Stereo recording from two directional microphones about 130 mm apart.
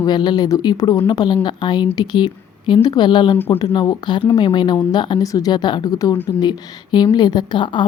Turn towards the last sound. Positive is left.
turn(degrees=35)  # may be behind; listen again after turning